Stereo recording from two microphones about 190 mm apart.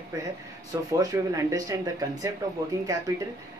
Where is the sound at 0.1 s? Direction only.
15° right (ahead or behind).